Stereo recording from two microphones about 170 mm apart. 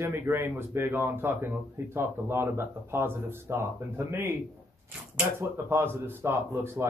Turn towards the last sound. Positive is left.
turn(degrees=-15)  # may be behind; listen again after turning